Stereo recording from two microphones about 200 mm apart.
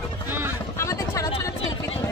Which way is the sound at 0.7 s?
15° left (ahead or behind).